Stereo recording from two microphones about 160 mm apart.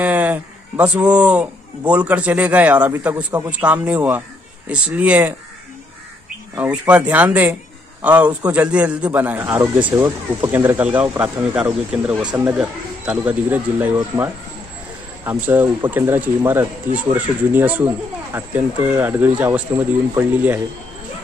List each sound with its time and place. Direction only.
0.0 s speech: 10° right (ahead or behind)
6.5 s speech: 10° right (ahead or behind)
9.5 s speech: 25° right (ahead or behind)
10.0 s speech: 15° right (ahead or behind)